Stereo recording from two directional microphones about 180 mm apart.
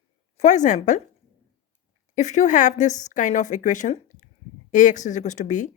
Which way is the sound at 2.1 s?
40° left (ahead or behind).